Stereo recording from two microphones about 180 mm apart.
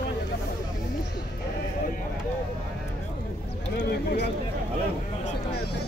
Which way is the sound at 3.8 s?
65° left (ahead or behind).